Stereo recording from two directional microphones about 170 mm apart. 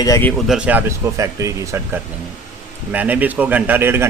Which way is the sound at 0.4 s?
5° right (ahead or behind).